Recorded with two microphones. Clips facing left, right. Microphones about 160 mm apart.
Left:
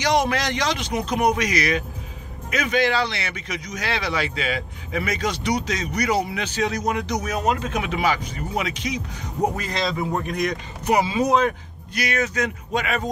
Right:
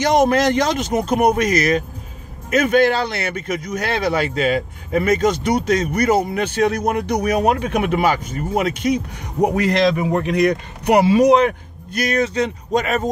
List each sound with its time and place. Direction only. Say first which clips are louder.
0.0 s speech: right 6 dB; 50° right (ahead or behind); by 11.5 s 70° right (ahead or behind)
11.9 s speech: right 5 dB; 45° right (ahead or behind)
12.2 s speech: right 5 dB; 30° right (ahead or behind)